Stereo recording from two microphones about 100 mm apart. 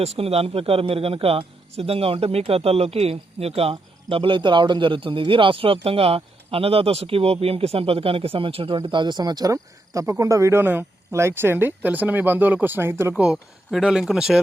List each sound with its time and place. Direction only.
0.0 s speech: 90° right; by 13.1 s 25° right (ahead or behind)
13.1 s speech: 5° right (ahead or behind)